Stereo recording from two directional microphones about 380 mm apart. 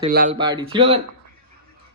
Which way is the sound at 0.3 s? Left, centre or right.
Centre.